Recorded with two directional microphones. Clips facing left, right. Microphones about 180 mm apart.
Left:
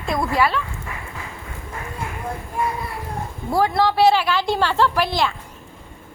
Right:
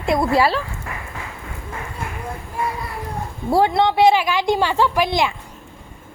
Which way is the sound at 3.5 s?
25° right (ahead or behind).